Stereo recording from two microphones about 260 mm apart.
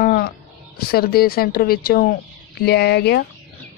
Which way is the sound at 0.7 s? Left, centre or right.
Left.